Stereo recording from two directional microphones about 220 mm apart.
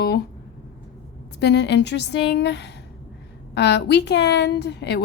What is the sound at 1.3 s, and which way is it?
A woman's voice, 50° left (ahead or behind).